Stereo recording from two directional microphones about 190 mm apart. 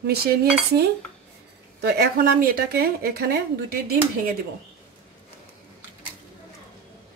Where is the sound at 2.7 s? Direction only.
55° right (ahead or behind).